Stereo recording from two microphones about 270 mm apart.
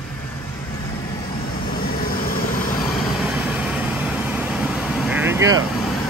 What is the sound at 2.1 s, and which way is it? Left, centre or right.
Vehicle, left.